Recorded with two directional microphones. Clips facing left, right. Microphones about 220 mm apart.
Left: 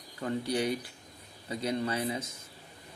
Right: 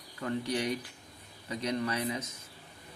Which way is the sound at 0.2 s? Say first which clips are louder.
Left 2 dB; 25° left (ahead or behind).